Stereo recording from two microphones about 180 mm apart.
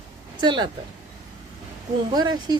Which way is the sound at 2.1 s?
25° right (ahead or behind).